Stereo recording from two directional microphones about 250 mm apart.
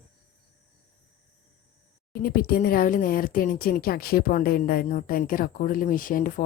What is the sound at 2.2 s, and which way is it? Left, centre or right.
Speech, left.